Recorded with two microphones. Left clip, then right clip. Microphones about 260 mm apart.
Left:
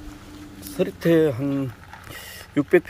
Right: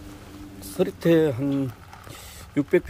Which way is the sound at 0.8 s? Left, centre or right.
Centre.